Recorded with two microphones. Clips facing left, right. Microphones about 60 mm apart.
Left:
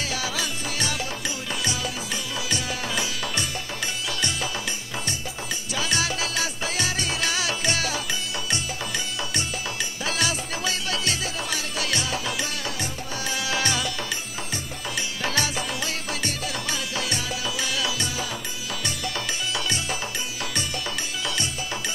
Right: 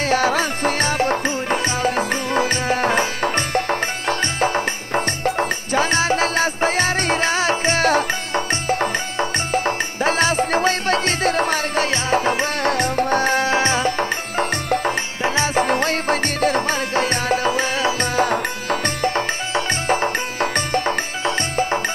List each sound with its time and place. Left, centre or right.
0.0 s music: right
12.7 s music: right
15.2 s music: right
15.5 s music: right